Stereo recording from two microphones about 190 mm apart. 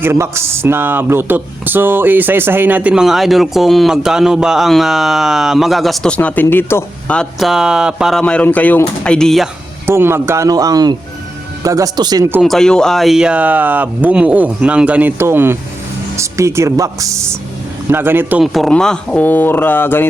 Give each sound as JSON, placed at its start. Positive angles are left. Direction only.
{"t": 0.0, "sound": "speech", "side_deg": -15}
{"t": 9.8, "sound": "speech", "side_deg": -10}
{"t": 12.4, "sound": "speech", "side_deg": 0}